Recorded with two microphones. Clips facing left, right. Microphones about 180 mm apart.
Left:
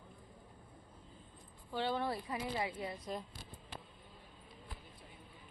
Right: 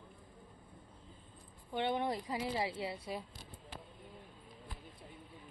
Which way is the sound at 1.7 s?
20° right (ahead or behind).